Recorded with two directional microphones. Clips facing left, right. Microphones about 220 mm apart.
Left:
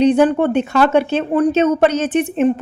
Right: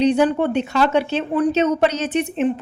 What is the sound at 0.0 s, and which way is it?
A woman's voice, 50° left (ahead or behind).